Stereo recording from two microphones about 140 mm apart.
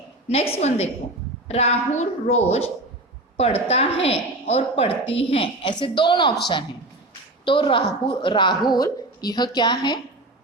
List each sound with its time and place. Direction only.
0.3 s a woman's voice: 50° left (ahead or behind)
7.4 s a woman's voice: 35° left (ahead or behind)